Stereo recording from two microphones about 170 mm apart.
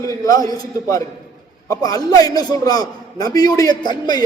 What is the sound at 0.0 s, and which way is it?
A man's voice, 20° left (ahead or behind).